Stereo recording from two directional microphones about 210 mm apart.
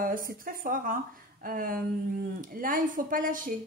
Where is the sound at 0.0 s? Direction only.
40° right (ahead or behind).